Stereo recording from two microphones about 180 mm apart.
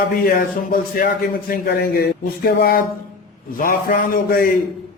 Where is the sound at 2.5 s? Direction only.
60° left (ahead or behind).